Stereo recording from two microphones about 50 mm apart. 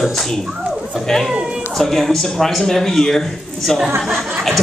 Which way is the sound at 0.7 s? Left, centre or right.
Centre.